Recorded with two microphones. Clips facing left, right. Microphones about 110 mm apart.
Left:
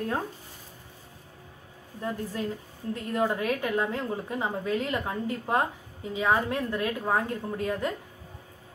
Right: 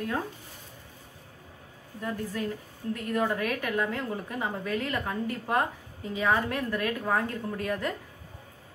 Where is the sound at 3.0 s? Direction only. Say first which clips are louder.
Left 1 dB; 25° left (ahead or behind).